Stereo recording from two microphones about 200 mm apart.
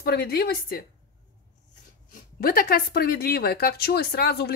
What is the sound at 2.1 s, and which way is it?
Speech, 45° left (ahead or behind).